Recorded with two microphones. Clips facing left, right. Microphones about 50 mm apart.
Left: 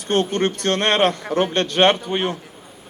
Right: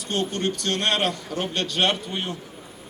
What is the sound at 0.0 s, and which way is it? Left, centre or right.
A man's voice, left.